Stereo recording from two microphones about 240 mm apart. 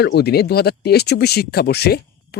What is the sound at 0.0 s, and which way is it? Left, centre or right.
Speech, left.